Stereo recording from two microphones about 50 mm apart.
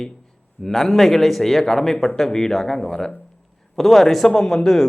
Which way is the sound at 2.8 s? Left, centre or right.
Centre.